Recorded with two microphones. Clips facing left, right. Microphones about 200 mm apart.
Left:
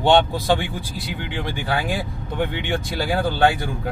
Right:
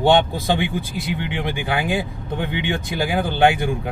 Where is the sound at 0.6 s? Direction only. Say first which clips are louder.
Right 5 dB; 20° right (ahead or behind).